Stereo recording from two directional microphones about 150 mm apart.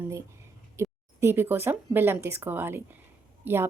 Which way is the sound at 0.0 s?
20° right (ahead or behind).